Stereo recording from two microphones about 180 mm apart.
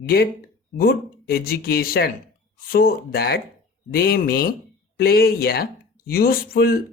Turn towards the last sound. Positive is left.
turn(degrees=55)  # may be behind; listen again after turning